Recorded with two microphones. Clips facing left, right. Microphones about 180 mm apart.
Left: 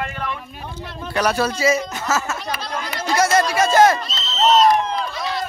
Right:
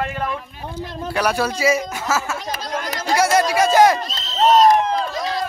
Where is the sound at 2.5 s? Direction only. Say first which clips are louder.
Right 1 dB; 40° right (ahead or behind).